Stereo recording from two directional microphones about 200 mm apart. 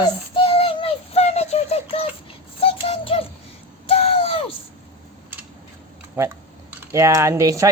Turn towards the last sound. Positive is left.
turn(degrees=-15)  # may be behind; listen again after turning